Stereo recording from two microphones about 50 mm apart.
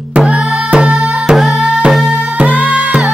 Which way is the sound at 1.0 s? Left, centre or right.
Centre.